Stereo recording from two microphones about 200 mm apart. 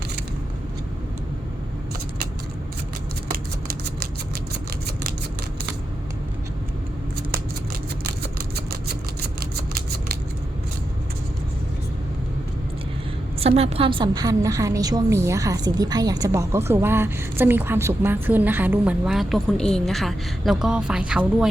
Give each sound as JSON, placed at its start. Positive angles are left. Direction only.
{"t": 3.2, "sound": "scissors", "side_deg": -50}
{"t": 8.0, "sound": "scissors", "side_deg": -50}
{"t": 13.4, "sound": "a woman's voice", "side_deg": -30}